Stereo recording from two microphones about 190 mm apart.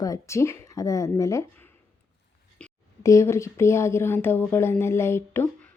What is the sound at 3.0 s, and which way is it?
A woman's voice, 15° left (ahead or behind).